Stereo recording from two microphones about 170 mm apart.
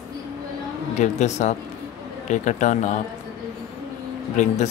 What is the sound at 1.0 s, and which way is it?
Speech, 40° left (ahead or behind).